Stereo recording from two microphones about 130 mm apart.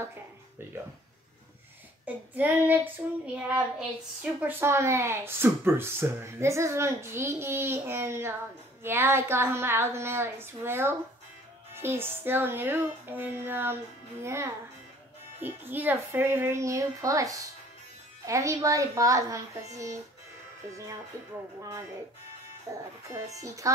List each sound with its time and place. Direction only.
2.0 s a woman's voice: 15° right (ahead or behind)
4.2 s a woman's voice: 15° right (ahead or behind)
21.5 s speech: 25° right (ahead or behind)